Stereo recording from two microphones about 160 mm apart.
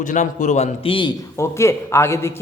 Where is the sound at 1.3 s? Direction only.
15° left (ahead or behind).